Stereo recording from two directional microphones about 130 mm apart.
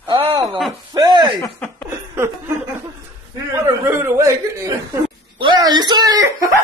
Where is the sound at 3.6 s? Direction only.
20° right (ahead or behind).